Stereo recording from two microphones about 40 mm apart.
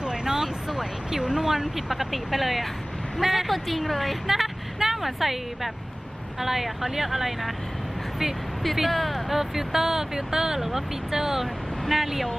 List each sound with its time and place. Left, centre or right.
0.0 s a sound: centre
0.7 s speech: centre
8.6 s speech: centre